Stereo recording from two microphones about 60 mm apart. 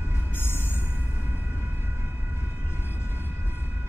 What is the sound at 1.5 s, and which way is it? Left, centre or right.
Siren, left.